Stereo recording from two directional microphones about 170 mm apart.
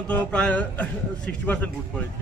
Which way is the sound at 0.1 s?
5° left (ahead or behind).